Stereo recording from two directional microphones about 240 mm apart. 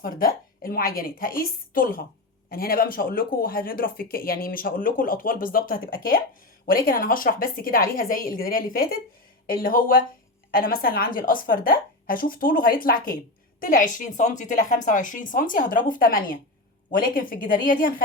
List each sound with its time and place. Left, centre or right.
0.0 s speech: left